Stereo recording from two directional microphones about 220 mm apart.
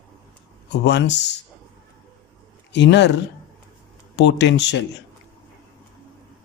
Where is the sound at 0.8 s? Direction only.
50° left (ahead or behind).